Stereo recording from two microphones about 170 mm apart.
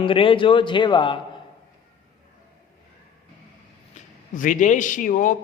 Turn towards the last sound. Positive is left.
turn(degrees=50)  # may be behind; listen again after turning